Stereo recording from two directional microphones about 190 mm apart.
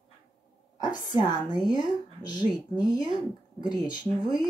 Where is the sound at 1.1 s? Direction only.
20° left (ahead or behind).